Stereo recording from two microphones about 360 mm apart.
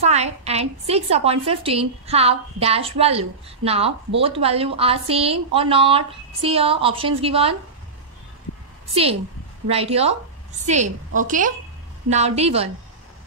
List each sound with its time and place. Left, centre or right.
0.0 s a woman's voice: centre
9.7 s a woman's voice: centre